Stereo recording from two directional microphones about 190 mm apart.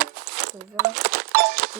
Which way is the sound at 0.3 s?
50° right (ahead or behind).